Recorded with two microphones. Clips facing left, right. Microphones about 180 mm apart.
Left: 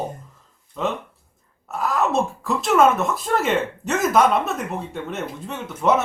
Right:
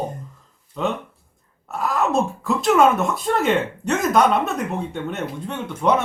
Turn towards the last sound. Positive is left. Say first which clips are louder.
# even
turn(degrees=5)  # may be behind; listen again after turning